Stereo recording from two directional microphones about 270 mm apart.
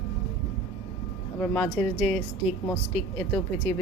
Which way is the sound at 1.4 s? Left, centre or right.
Centre.